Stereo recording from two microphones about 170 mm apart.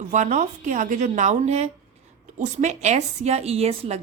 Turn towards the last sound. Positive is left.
turn(degrees=-40)  # may be behind; listen again after turning